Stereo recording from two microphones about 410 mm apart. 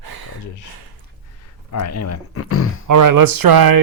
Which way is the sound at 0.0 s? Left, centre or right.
Right.